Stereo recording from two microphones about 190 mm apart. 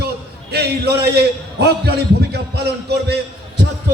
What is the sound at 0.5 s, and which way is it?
A man's voice, 60° right (ahead or behind).